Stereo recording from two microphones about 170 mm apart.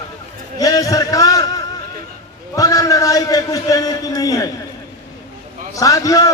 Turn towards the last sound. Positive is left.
turn(degrees=20)  # may be behind; listen again after turning